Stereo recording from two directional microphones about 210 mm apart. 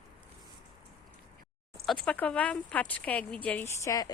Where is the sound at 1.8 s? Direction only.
5° left (ahead or behind).